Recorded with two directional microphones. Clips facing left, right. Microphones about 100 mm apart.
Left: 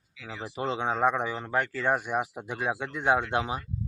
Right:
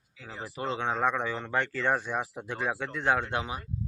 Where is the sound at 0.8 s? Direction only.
15° left (ahead or behind).